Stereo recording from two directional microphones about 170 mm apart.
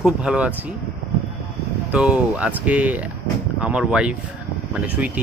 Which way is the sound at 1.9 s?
5° right (ahead or behind).